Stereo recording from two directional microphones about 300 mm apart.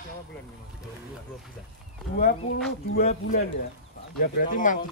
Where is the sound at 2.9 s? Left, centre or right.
Left.